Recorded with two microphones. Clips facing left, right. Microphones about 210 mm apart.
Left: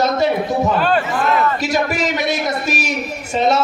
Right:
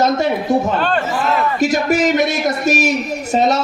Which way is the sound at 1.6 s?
50° right (ahead or behind).